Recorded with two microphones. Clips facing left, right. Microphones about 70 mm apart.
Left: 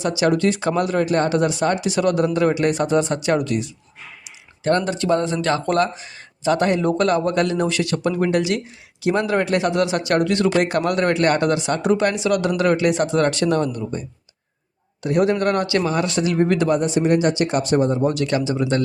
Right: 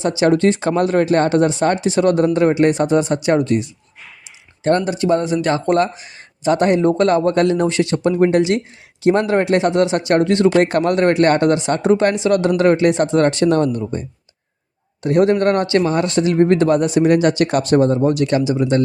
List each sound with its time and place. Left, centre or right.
0.0 s speech: right
4.2 s a sound: right
4.8 s speech: right
15.0 s speech: right
18.0 s speech: right